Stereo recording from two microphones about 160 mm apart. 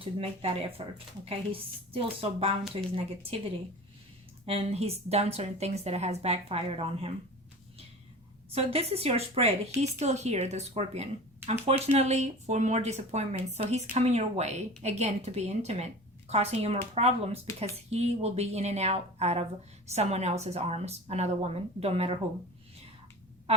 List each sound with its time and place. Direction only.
0.0 s a woman's voice: 35° right (ahead or behind)
4.4 s a woman's voice: 40° right (ahead or behind)
8.5 s a woman's voice: 40° right (ahead or behind)